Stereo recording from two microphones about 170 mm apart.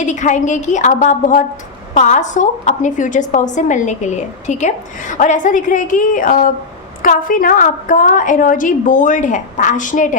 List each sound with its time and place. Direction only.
0.0 s a woman's voice: 45° left (ahead or behind)